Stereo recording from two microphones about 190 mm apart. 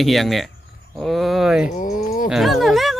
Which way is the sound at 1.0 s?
Centre (ahead or behind).